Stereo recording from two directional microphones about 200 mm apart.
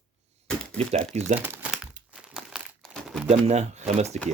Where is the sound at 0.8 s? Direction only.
30° right (ahead or behind).